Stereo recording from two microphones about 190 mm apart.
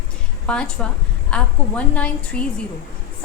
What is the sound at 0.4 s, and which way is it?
A woman's voice, 5° left (ahead or behind).